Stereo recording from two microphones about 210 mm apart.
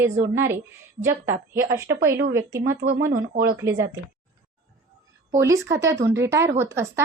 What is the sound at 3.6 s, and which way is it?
Speech, 15° right (ahead or behind).